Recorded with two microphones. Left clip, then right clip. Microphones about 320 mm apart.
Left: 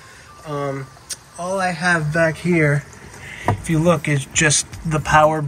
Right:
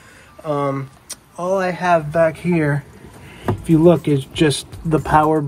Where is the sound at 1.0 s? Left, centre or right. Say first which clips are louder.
Right 4 dB; right.